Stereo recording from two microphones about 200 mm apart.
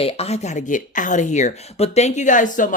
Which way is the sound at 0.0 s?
30° left (ahead or behind).